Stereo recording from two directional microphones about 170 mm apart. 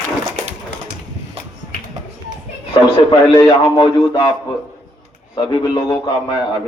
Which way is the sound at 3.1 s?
25° left (ahead or behind).